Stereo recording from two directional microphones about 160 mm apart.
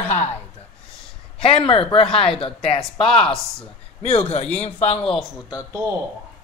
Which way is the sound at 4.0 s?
40° left (ahead or behind).